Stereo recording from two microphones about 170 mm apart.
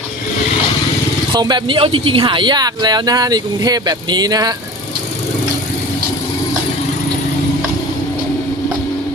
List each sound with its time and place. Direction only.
1.3 s speech: 25° right (ahead or behind)